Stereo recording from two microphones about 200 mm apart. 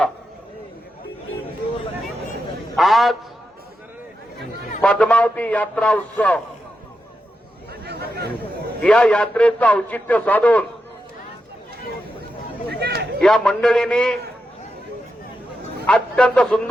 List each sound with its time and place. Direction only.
2.7 s a man's voice: centre (ahead or behind)
4.8 s a man's voice: 5° left (ahead or behind)
7.7 s chatter: 55° right (ahead or behind)
8.8 s a man's voice: 5° left (ahead or behind)
12.8 s a sound: 55° right (ahead or behind)
13.2 s a man's voice: 5° left (ahead or behind)
15.9 s a man's voice: 5° left (ahead or behind)